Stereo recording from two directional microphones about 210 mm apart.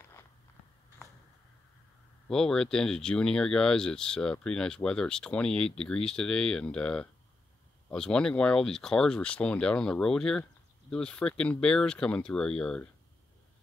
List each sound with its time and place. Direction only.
2.2 s speech: 5° left (ahead or behind)